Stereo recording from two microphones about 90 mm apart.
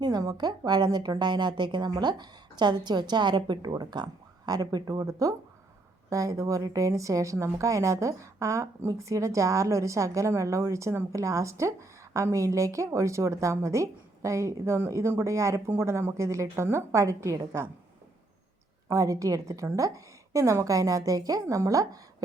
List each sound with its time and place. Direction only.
0.0 s a woman's voice: 45° right (ahead or behind)
18.9 s a woman's voice: 40° right (ahead or behind)